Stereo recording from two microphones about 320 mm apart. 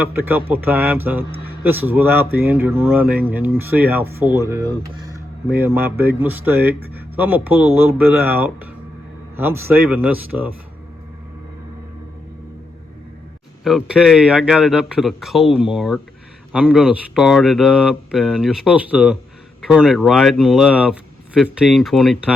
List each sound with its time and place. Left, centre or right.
0.0 s speech: centre
13.7 s speech: centre